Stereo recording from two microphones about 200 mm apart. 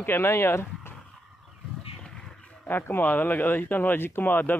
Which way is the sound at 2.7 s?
10° left (ahead or behind).